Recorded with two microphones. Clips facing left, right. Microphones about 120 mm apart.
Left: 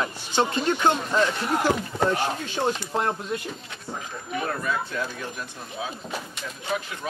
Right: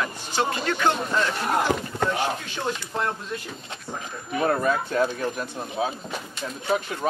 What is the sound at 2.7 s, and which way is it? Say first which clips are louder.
Speech: left 1 dB; 25° left (ahead or behind).